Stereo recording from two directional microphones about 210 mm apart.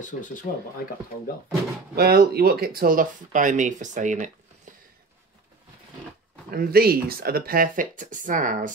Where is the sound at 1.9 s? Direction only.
45° right (ahead or behind).